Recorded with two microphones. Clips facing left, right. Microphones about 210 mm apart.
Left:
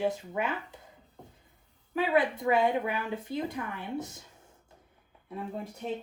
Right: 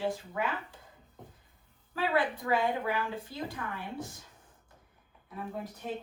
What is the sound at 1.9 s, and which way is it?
Speech, 20° left (ahead or behind).